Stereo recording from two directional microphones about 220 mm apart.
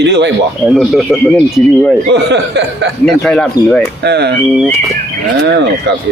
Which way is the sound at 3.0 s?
Centre (ahead or behind).